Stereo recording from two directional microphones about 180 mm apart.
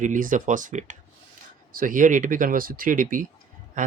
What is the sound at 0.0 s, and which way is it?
Speech, 45° right (ahead or behind).